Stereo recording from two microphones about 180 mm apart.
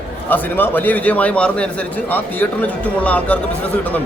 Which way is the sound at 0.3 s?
10° left (ahead or behind).